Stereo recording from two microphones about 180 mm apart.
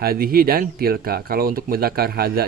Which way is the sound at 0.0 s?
55° right (ahead or behind).